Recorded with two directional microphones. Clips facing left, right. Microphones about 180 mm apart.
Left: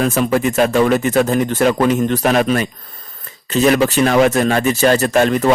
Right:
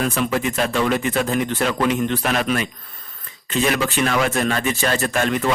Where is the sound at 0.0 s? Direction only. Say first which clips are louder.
Left 6 dB; 45° left (ahead or behind).